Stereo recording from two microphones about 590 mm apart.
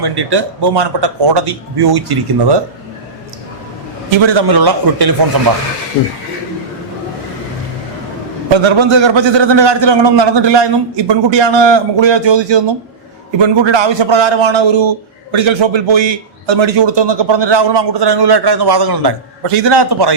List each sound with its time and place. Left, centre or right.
0.0 s a man's voice: right
4.2 s a man's voice: right
8.5 s a man's voice: right
19.5 s a man's voice: right